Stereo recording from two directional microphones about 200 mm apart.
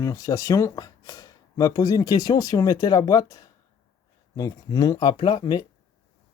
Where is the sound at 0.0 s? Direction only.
15° left (ahead or behind).